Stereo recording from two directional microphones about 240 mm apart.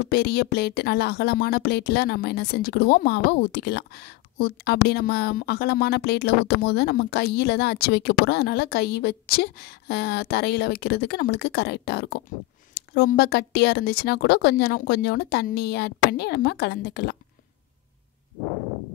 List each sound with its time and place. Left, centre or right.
0.1 s speech: left